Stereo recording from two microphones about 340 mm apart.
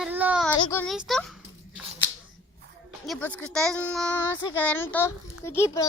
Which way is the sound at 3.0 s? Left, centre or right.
Centre.